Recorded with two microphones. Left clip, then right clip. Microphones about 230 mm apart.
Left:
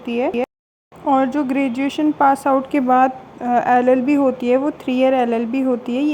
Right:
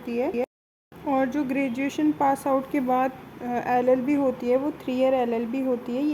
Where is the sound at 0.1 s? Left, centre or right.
Centre.